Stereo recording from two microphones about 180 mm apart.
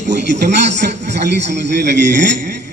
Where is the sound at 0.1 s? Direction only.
65° right (ahead or behind).